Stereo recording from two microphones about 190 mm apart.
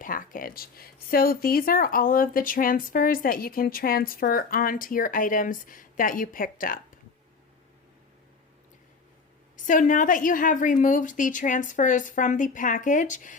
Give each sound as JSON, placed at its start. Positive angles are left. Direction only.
{"t": 0.0, "sound": "speech", "side_deg": 45}
{"t": 9.6, "sound": "speech", "side_deg": 45}